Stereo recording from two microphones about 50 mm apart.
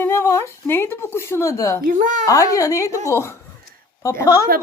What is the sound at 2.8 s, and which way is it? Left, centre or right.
A woman's voice, left.